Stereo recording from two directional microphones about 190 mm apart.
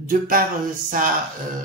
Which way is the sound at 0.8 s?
45° right (ahead or behind).